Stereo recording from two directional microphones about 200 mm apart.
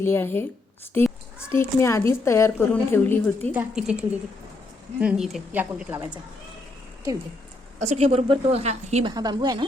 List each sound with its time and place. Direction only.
0.0 s a child's voice: 10° left (ahead or behind)
3.5 s speech: 5° right (ahead or behind)
7.8 s a woman's voice: 35° right (ahead or behind)
9.1 s speech: 20° right (ahead or behind)